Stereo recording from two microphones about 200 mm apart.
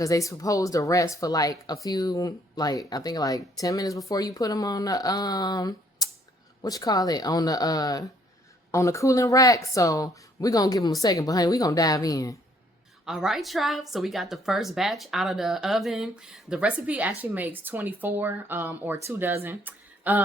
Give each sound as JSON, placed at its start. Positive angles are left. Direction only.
{"t": 0.0, "sound": "speech", "side_deg": 15}
{"t": 13.1, "sound": "speech", "side_deg": 0}